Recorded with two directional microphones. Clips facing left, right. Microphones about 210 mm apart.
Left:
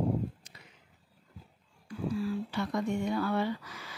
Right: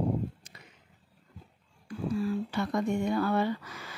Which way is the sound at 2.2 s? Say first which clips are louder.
Right 4 dB; 50° right (ahead or behind).